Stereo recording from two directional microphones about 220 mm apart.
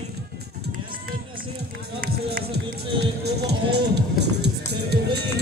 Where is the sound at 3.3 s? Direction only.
50° right (ahead or behind).